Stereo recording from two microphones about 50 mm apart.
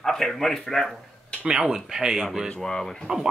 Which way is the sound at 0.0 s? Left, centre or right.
Centre.